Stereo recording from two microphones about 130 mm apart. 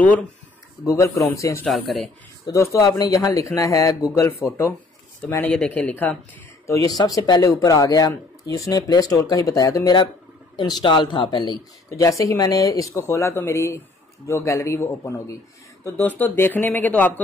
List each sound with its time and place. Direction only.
0.8 s speech: 25° left (ahead or behind)
6.6 s speech: 25° left (ahead or behind)
12.0 s speech: 25° left (ahead or behind)